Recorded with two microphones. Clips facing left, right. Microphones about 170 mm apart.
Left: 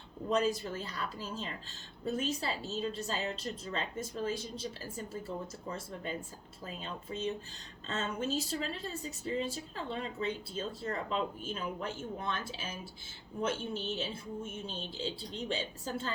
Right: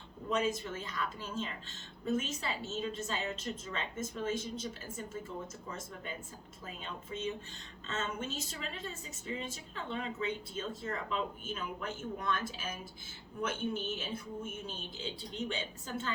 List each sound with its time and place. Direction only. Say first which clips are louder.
0.3 s speech: left 2 dB; 35° left (ahead or behind)